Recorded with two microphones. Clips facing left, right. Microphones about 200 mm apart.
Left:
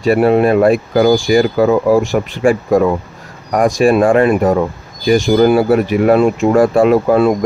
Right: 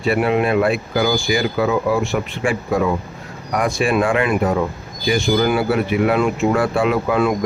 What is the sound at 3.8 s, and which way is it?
Speech, 40° left (ahead or behind).